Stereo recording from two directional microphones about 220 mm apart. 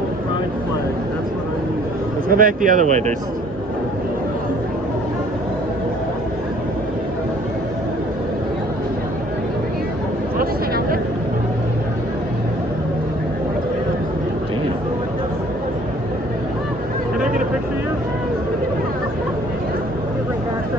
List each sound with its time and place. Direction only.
2.2 s speech: 40° right (ahead or behind)